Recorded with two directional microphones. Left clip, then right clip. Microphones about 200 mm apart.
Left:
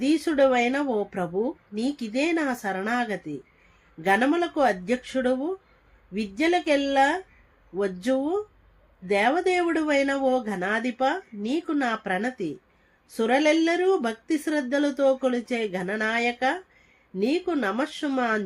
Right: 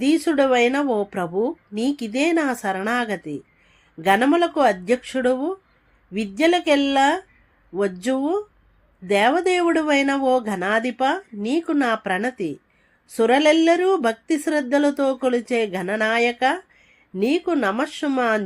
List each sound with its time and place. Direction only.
0.0 s speech: 40° right (ahead or behind)